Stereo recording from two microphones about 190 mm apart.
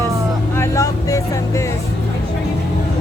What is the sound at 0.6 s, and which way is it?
Vehicle, 15° left (ahead or behind).